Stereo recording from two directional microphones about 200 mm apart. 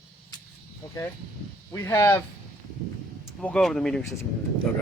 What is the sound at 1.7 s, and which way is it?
Speech, 15° left (ahead or behind).